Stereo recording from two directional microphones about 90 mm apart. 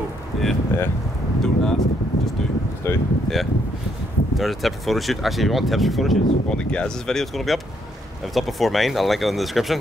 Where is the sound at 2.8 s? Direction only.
30° left (ahead or behind).